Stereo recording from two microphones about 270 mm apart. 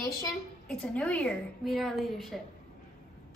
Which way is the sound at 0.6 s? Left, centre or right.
Centre.